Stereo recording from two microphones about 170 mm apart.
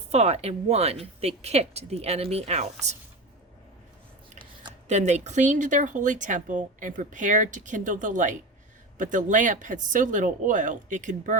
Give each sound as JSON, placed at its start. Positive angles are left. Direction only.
{"t": 0.1, "sound": "speech", "side_deg": -40}
{"t": 4.9, "sound": "speech", "side_deg": -40}